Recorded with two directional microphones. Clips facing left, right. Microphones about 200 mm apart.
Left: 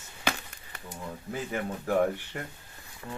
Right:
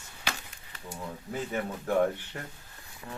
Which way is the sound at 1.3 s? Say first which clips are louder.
Even; 10° left (ahead or behind).